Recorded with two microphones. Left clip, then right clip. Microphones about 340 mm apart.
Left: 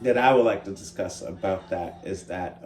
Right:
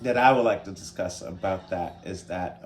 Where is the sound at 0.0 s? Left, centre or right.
Centre.